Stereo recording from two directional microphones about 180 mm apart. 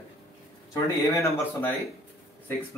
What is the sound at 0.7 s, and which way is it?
A man's voice, 15° left (ahead or behind).